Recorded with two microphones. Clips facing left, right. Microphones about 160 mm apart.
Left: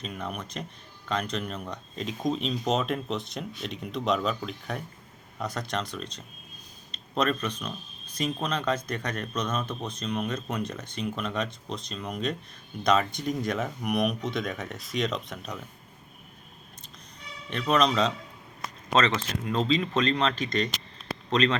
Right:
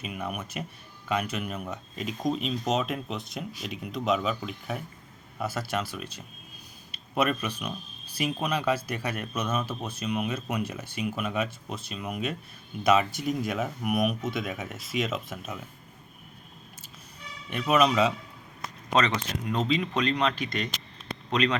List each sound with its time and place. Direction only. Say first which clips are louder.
0.0 s speech: right 1 dB; 10° right (ahead or behind)
17.5 s speech: right 1 dB; 10° right (ahead or behind)